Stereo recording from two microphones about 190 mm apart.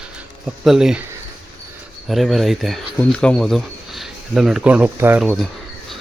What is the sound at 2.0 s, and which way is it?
Speech, centre (ahead or behind).